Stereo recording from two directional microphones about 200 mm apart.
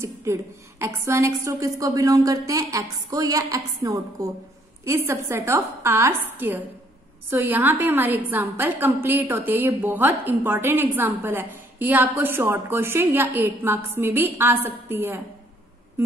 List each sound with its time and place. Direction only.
0.0 s a woman's voice: 15° right (ahead or behind)